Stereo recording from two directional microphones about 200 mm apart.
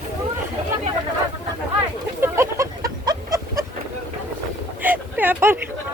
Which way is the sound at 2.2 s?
15° right (ahead or behind).